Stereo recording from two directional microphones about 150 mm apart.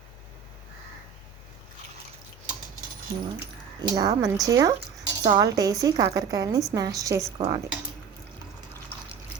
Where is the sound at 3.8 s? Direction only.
25° right (ahead or behind).